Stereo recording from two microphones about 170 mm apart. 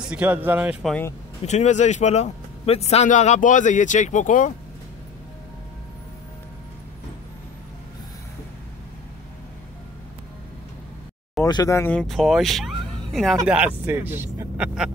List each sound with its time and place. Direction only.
0.0 s speech: 5° right (ahead or behind)
1.4 s speech: 40° left (ahead or behind)
11.4 s speech: 20° left (ahead or behind); by 14.9 s 10° right (ahead or behind)